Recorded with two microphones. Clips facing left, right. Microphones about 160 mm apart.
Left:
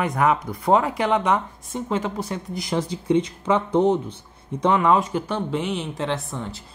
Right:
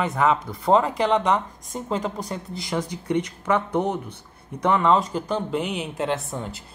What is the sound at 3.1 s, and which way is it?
Speech, 20° left (ahead or behind).